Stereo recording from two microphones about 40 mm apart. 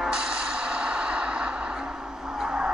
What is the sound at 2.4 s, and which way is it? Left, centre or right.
Vehicle, right.